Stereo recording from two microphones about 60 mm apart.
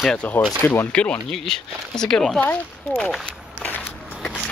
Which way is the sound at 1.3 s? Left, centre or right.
Centre.